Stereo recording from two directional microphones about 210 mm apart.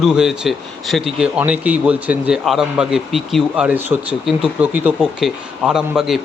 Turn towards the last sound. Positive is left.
turn(degrees=0)  # may be behind; listen again after turning